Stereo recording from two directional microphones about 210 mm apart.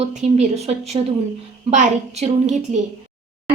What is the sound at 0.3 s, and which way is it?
A woman's voice, 30° right (ahead or behind).